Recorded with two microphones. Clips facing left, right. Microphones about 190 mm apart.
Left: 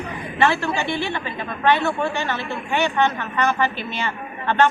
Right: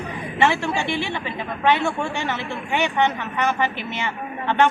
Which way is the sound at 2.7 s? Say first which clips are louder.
Left 1 dB; 15° right (ahead or behind).